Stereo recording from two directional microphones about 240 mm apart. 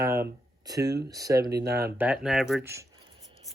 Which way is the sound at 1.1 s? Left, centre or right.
Centre.